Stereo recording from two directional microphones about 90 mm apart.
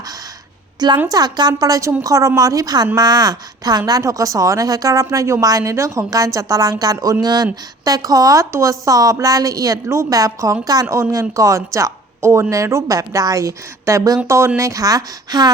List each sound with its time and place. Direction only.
0.8 s a woman's voice: 50° right (ahead or behind)